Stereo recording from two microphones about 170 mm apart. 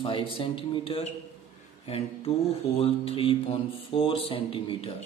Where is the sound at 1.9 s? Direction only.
35° left (ahead or behind).